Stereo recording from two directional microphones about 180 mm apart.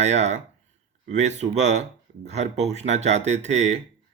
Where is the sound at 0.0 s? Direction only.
40° right (ahead or behind).